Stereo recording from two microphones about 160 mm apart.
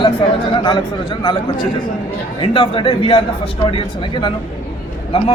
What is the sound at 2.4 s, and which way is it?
A man's voice, 35° left (ahead or behind).